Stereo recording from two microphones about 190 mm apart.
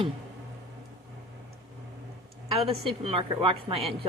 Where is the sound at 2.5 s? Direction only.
30° right (ahead or behind).